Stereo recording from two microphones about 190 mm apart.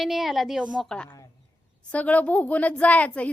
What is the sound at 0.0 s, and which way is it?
A woman's voice, centre (ahead or behind).